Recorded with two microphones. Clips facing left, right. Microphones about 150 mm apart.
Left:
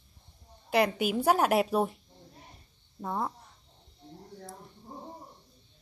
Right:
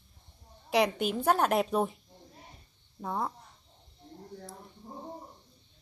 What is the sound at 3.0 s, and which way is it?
Speech, centre (ahead or behind).